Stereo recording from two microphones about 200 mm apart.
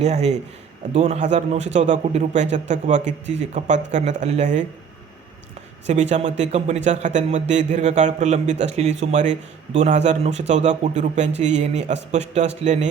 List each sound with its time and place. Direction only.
0.0 s speech: 30° right (ahead or behind)
5.9 s speech: 35° right (ahead or behind)